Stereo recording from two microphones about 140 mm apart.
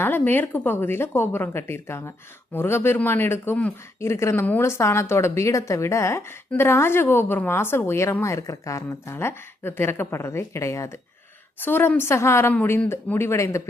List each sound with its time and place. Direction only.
0.0 s a woman's voice: 15° left (ahead or behind)